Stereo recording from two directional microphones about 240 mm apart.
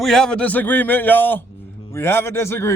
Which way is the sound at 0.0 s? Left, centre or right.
Centre.